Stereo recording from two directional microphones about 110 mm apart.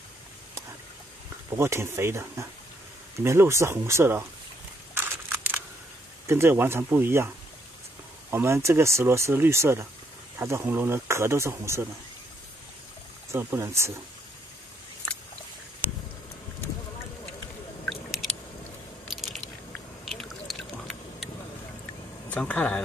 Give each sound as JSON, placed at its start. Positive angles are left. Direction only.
{"t": 1.5, "sound": "speech", "side_deg": -25}
{"t": 4.9, "sound": "crumpling", "side_deg": -20}
{"t": 6.2, "sound": "speech", "side_deg": -25}
{"t": 8.3, "sound": "speech", "side_deg": -25}
{"t": 13.3, "sound": "speech", "side_deg": -20}
{"t": 17.8, "sound": "a sound", "side_deg": 0}
{"t": 19.0, "sound": "biting", "side_deg": 0}
{"t": 20.1, "sound": "a sound", "side_deg": 0}
{"t": 22.3, "sound": "speech", "side_deg": 10}